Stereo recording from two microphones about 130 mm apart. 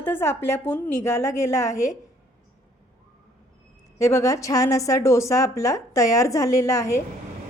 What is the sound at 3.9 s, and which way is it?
A woman's voice, 25° left (ahead or behind).